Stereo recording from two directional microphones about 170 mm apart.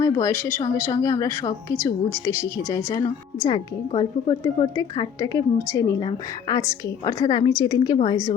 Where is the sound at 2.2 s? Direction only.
20° left (ahead or behind).